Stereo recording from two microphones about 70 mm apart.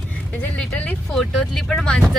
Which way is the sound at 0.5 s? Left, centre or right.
Centre.